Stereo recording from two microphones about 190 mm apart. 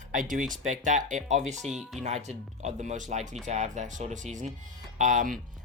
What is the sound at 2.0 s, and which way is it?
Speech, 35° right (ahead or behind).